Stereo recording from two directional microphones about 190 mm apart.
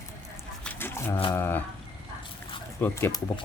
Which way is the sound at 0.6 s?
10° left (ahead or behind).